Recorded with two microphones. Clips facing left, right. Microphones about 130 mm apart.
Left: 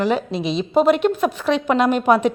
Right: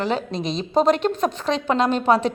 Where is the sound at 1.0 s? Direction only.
35° right (ahead or behind).